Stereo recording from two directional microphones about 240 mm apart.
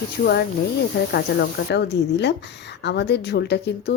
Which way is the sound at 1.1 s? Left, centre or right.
Left.